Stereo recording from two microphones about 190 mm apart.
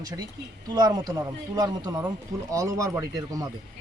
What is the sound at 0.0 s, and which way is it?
Speech, 20° right (ahead or behind).